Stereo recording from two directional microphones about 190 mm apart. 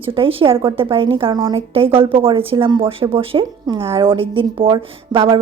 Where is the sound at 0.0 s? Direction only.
30° right (ahead or behind).